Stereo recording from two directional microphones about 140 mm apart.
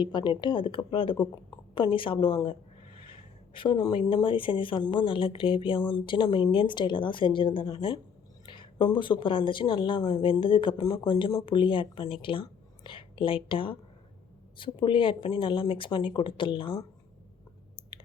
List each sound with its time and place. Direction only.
0.0 s speech: 35° left (ahead or behind)